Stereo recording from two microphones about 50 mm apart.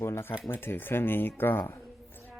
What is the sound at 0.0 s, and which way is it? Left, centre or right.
Speech, left.